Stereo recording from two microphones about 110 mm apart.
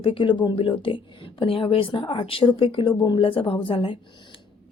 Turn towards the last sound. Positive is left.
turn(degrees=50)  # may be behind; listen again after turning